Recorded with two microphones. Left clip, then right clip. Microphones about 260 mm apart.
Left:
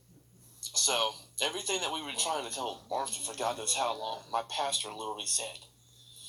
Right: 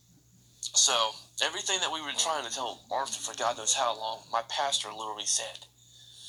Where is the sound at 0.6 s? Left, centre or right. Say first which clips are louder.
Right 3 dB; centre.